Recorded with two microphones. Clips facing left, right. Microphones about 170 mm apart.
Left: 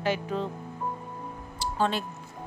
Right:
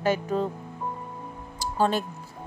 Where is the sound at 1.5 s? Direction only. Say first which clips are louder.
Right 3 dB; 40° right (ahead or behind).